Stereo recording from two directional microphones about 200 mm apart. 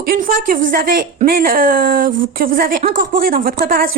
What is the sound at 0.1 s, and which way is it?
Speech, 45° right (ahead or behind).